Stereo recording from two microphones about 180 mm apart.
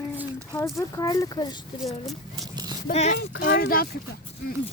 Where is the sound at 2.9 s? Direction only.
40° left (ahead or behind).